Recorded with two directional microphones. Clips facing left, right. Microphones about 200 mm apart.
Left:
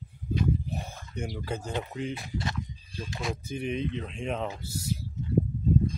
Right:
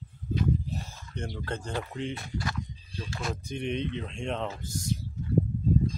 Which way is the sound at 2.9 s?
15° left (ahead or behind).